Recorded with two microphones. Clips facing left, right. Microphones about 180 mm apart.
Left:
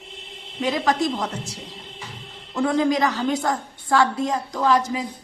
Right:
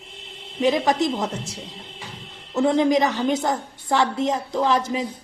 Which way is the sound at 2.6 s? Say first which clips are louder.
Right 2 dB; 20° right (ahead or behind).